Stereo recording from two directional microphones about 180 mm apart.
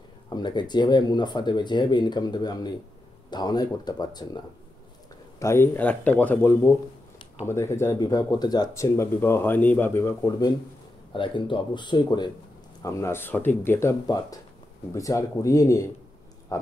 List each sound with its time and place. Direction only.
0.3 s speech: 25° left (ahead or behind)
5.4 s speech: 15° left (ahead or behind)
11.1 s speech: 25° left (ahead or behind)